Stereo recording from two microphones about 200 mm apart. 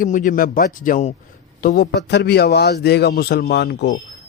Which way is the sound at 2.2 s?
55° left (ahead or behind).